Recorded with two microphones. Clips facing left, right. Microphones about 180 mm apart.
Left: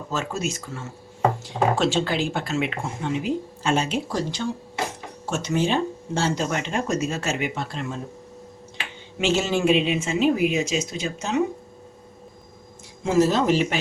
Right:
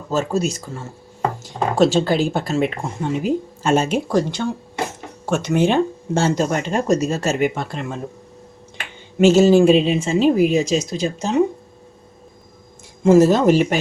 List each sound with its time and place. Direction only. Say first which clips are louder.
0.1 s speech: right 8 dB; 35° right (ahead or behind); by 7.9 s 55° right (ahead or behind)
9.1 s speech: right 11 dB; 40° right (ahead or behind)
13.1 s speech: right 7 dB; 50° right (ahead or behind)